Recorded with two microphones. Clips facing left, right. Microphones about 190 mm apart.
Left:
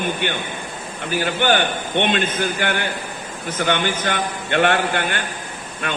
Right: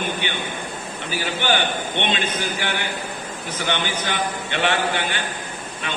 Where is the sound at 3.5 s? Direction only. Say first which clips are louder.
Left 5 dB; 50° left (ahead or behind).